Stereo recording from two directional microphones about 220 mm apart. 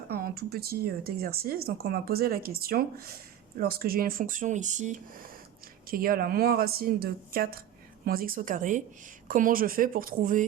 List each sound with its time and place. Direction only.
0.1 s speech: 45° right (ahead or behind)